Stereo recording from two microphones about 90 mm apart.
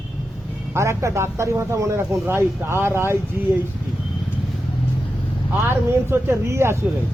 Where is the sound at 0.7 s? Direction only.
30° right (ahead or behind).